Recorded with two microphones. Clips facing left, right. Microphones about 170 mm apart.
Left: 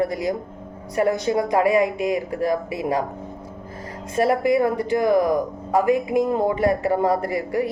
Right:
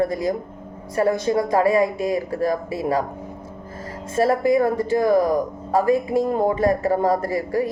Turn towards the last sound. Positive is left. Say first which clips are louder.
# right 1 dB
turn(degrees=20)  # may be behind; listen again after turning